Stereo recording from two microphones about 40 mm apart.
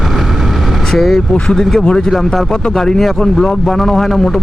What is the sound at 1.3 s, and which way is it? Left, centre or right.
A man's voice, left.